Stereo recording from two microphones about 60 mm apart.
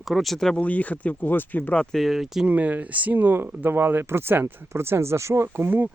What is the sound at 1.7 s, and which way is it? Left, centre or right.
Speech, centre.